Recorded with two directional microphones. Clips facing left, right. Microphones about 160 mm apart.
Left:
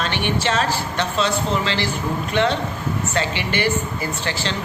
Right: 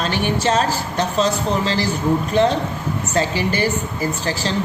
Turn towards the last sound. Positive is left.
turn(degrees=-40)  # may be behind; listen again after turning